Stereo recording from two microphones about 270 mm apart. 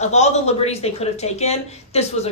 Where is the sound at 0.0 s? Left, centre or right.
Left.